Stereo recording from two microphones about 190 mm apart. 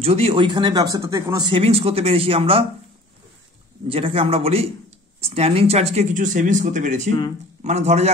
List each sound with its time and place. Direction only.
0.0 s speech: 30° right (ahead or behind)
3.8 s speech: 30° right (ahead or behind)